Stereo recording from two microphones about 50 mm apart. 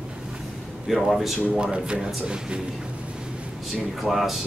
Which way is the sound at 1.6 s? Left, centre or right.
Centre.